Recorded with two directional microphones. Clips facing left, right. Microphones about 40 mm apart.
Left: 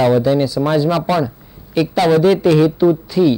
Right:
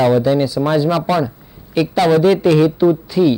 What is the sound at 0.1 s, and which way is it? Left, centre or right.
A man's voice, centre.